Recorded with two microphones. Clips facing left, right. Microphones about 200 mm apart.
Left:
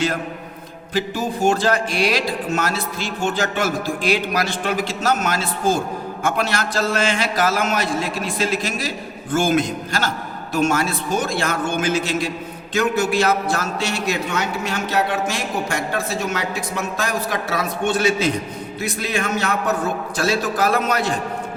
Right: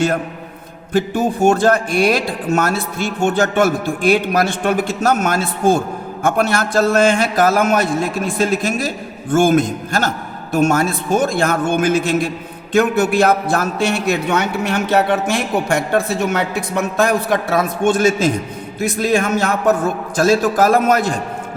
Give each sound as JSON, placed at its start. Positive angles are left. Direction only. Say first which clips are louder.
{"t": 1.1, "sound": "a man's voice", "louder": "right 4 dB", "side_deg": -50}